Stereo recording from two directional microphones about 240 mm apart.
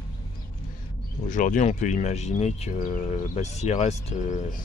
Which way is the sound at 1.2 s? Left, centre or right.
Left.